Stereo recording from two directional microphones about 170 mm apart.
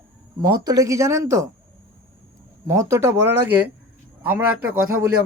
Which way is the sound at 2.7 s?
15° right (ahead or behind).